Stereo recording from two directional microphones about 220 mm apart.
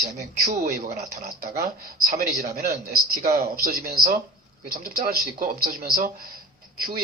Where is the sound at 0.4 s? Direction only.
35° right (ahead or behind).